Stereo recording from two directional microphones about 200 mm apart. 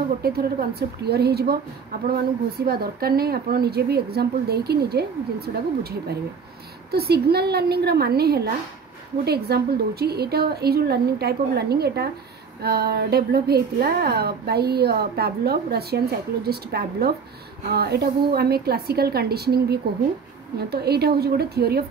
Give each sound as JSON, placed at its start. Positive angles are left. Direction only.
{"t": 0.2, "sound": "a woman's voice", "side_deg": -50}